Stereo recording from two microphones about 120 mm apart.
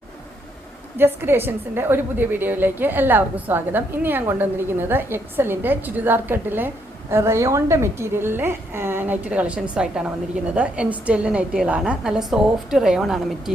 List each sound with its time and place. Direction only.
0.9 s a woman's voice: 20° right (ahead or behind); by 13.5 s centre (ahead or behind)